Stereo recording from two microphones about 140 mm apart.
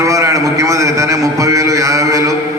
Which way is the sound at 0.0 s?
20° right (ahead or behind).